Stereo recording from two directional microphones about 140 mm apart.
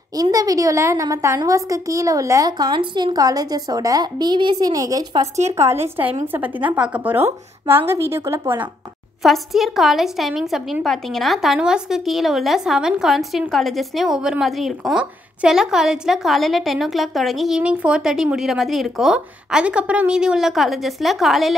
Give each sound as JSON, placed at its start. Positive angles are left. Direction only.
{"t": 0.1, "sound": "a woman's voice", "side_deg": -25}
{"t": 9.2, "sound": "a woman's voice", "side_deg": 0}